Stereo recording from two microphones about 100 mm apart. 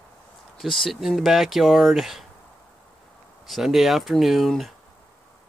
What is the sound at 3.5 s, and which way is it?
Speech, centre (ahead or behind).